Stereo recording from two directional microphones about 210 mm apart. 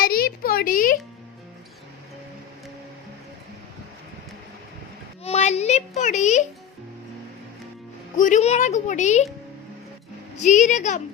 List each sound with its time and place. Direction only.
0.0 s a woman's voice: 45° left (ahead or behind)
5.2 s a sound: 30° left (ahead or behind)
8.1 s speech: 35° left (ahead or behind)
10.3 s speech: 35° left (ahead or behind)